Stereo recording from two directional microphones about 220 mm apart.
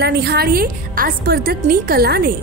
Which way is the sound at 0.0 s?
45° right (ahead or behind).